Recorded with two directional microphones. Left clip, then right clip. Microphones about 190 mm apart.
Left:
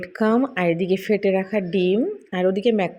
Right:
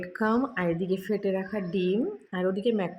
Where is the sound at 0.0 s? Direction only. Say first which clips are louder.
Left 6 dB; 20° left (ahead or behind).